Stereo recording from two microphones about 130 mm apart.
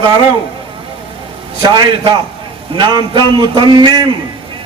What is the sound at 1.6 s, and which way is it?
A man's voice, 35° right (ahead or behind).